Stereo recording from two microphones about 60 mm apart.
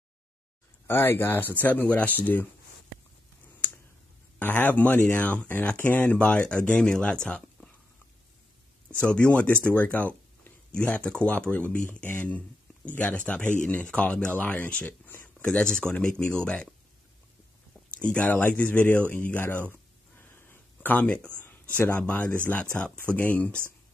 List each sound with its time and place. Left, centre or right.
0.8 s speech: left
4.4 s speech: left; by 7.7 s centre
8.9 s speech: centre
17.9 s speech: left
20.2 s a sound: left
20.9 s speech: left
21.5 s a sound: left
22.0 s speech: left